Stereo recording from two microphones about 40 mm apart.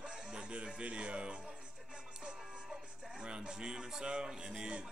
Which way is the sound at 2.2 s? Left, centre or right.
Right.